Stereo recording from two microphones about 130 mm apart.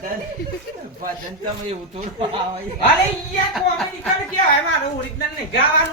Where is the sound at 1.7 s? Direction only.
50° right (ahead or behind).